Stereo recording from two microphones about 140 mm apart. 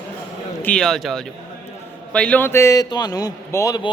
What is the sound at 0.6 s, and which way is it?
Speech, 5° left (ahead or behind).